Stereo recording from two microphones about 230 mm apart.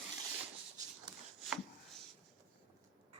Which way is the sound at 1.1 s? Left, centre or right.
Centre.